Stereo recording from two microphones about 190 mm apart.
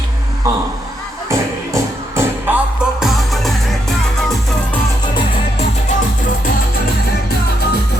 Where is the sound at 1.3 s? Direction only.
15° right (ahead or behind).